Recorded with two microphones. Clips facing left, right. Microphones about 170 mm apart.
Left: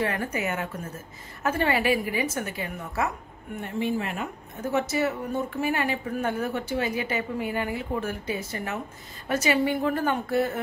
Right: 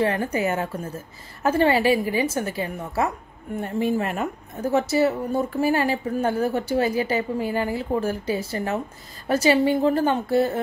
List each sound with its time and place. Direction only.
0.0 s a woman's voice: 30° right (ahead or behind)
3.6 s a woman's voice: 45° right (ahead or behind)